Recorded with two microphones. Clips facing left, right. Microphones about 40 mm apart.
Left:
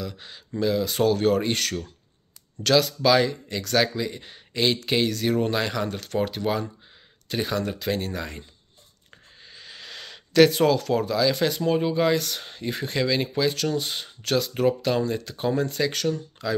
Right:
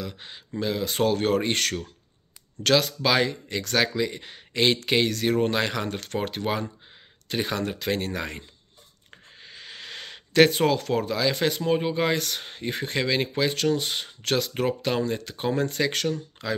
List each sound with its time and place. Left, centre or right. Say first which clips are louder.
0.0 s speech: left 1 dB; right
9.4 s a sound: right 2 dB; right
11.6 s speech: left 3 dB; right